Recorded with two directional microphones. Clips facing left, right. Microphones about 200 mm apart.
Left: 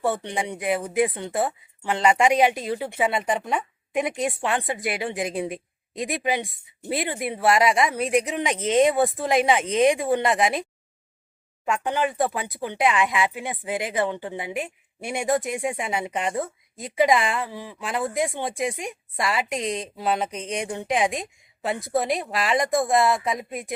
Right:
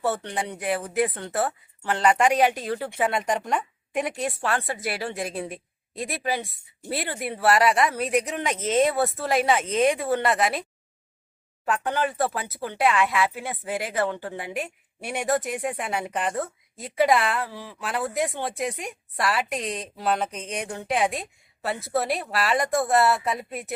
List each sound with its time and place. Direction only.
0.0 s speech: 15° left (ahead or behind)